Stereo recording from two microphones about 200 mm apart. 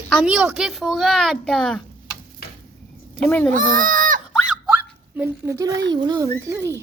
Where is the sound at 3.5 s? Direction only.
40° right (ahead or behind).